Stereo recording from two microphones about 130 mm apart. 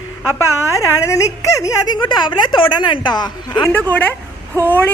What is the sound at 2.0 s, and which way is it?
Speech, 35° left (ahead or behind).